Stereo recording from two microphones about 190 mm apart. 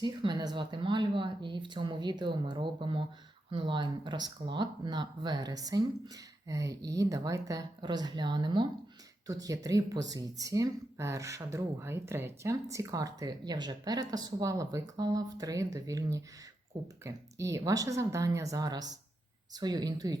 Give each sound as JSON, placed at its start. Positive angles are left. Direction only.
{"t": 0.0, "sound": "speech", "side_deg": -25}